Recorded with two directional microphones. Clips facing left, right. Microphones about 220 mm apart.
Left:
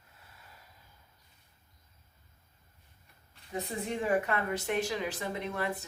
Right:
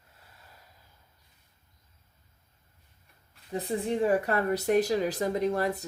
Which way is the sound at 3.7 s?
35° right (ahead or behind).